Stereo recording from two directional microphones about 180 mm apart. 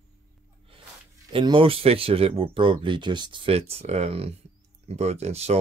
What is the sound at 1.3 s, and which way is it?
Speech, 30° right (ahead or behind).